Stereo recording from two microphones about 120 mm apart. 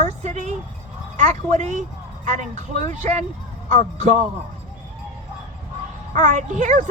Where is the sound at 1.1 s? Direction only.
90° right.